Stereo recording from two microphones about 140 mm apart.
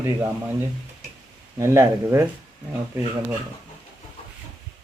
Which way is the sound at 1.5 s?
20° right (ahead or behind).